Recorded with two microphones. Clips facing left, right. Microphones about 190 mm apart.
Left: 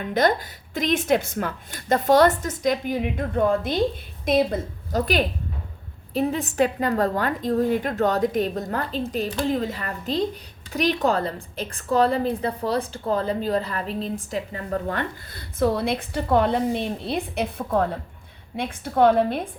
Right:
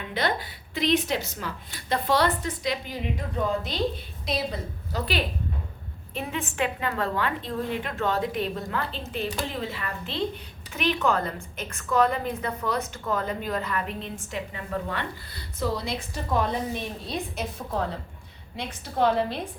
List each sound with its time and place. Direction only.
0.1 s a woman's voice: 45° left (ahead or behind)